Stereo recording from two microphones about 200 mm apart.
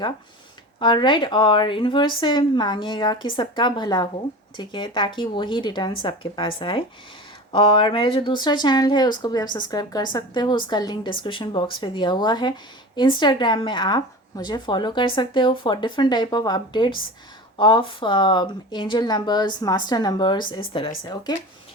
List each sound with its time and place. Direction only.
0.8 s speech: 25° left (ahead or behind)